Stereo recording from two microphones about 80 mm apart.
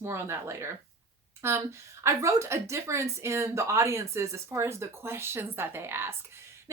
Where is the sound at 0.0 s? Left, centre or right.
Right.